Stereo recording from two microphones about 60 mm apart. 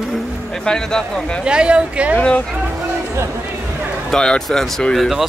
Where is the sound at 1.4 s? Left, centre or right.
Centre.